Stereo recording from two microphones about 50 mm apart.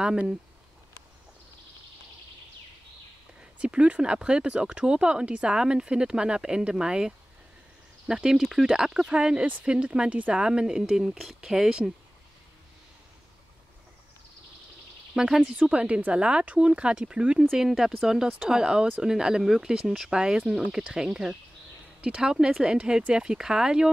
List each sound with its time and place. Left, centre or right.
0.0 s speech: centre
3.3 s speech: right; by 8.7 s centre
8.7 s speech: centre
10.4 s speech: centre
15.1 s speech: centre
15.5 s speech: right